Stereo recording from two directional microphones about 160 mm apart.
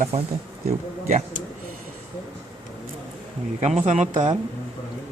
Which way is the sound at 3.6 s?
45° right (ahead or behind).